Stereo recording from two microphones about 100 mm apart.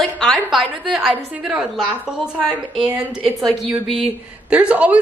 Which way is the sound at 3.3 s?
Centre (ahead or behind).